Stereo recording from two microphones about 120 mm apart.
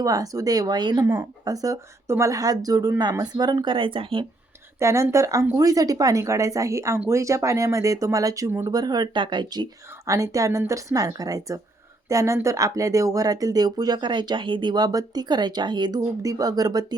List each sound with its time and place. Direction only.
0.0 s speech: 30° right (ahead or behind); by 4.3 s 45° right (ahead or behind)
4.8 s speech: 25° right (ahead or behind)
8.7 s speech: 35° right (ahead or behind)
10.1 s speech: 25° right (ahead or behind)